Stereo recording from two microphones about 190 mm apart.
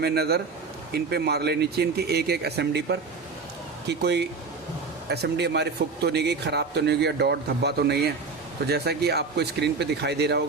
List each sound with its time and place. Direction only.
0.0 s speech: 55° right (ahead or behind)